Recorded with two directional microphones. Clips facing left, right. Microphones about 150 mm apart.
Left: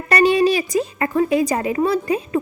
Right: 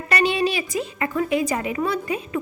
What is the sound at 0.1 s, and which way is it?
A woman's voice, 40° left (ahead or behind).